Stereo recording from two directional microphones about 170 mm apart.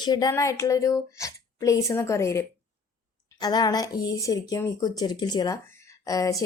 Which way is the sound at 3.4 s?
25° left (ahead or behind).